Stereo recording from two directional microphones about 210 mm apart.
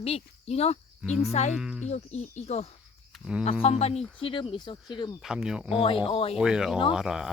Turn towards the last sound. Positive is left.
turn(degrees=-5)  # may be behind; listen again after turning